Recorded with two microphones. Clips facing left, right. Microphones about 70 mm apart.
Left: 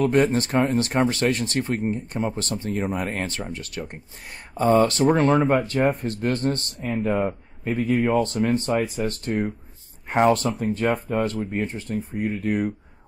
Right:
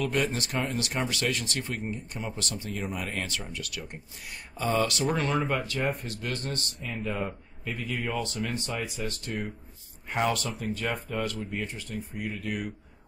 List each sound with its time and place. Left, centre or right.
0.0 s speech: left